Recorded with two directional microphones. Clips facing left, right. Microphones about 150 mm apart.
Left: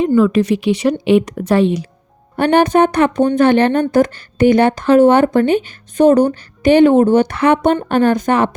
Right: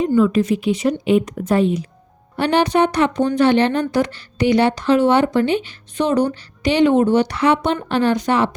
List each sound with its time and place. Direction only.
0.0 s a woman's voice: 70° left (ahead or behind)
2.3 s speech: 50° left (ahead or behind)